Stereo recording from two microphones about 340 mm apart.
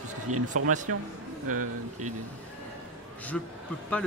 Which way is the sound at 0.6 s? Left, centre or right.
Right.